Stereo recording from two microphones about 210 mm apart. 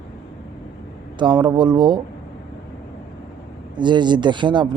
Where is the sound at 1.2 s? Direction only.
20° right (ahead or behind).